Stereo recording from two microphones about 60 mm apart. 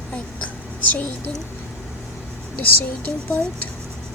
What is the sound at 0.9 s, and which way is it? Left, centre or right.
Speech, left.